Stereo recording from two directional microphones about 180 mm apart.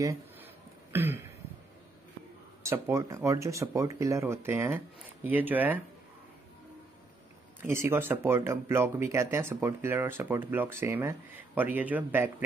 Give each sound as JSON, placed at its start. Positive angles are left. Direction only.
{"t": 0.0, "sound": "a sound", "side_deg": -20}
{"t": 0.9, "sound": "speech", "side_deg": -15}
{"t": 2.6, "sound": "speech", "side_deg": -15}
{"t": 7.6, "sound": "speech", "side_deg": -15}